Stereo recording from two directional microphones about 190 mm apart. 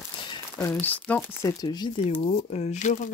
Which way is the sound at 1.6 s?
20° left (ahead or behind).